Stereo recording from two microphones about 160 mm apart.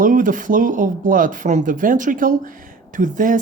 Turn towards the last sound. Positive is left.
turn(degrees=-55)  # may be behind; listen again after turning